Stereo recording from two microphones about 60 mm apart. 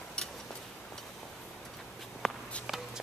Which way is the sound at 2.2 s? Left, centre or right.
Centre.